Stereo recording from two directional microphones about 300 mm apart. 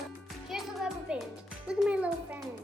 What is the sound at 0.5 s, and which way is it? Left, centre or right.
Music, centre.